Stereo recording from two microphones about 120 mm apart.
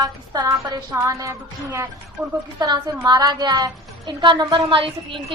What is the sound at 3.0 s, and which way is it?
A woman's voice, 35° right (ahead or behind).